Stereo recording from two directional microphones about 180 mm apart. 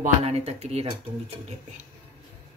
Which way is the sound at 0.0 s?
35° right (ahead or behind).